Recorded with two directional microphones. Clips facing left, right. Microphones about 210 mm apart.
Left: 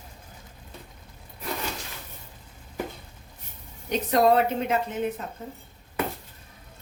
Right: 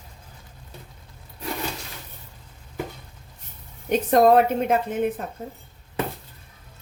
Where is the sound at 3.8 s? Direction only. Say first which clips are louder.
Right 4 dB; 50° right (ahead or behind).